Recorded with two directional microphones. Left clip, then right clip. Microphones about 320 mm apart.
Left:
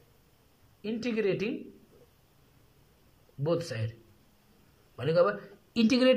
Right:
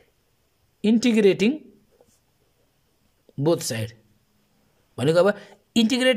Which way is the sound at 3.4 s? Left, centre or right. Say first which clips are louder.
Right 8 dB; right.